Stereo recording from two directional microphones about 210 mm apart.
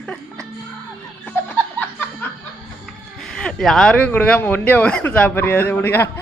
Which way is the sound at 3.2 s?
5° left (ahead or behind).